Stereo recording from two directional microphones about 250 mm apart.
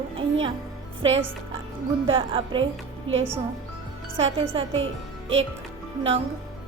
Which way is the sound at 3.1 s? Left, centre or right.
Right.